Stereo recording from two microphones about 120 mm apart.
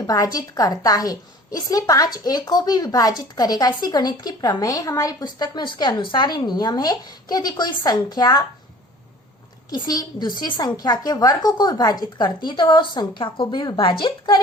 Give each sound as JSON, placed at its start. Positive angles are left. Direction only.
{"t": 0.1, "sound": "speech", "side_deg": 30}
{"t": 9.6, "sound": "speech", "side_deg": 35}